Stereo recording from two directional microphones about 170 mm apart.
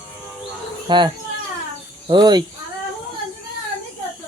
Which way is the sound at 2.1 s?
25° right (ahead or behind).